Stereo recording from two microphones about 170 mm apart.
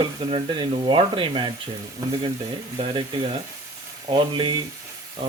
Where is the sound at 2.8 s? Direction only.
30° right (ahead or behind).